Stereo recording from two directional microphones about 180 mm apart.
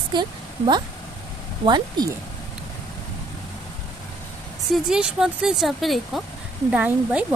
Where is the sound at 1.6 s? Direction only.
25° right (ahead or behind).